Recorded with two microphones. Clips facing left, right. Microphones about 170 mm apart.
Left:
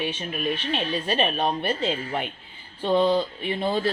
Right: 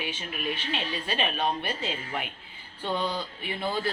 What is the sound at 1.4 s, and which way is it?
Speech, 30° left (ahead or behind).